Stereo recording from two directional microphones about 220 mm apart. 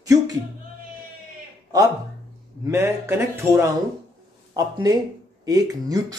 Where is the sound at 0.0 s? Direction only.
15° right (ahead or behind).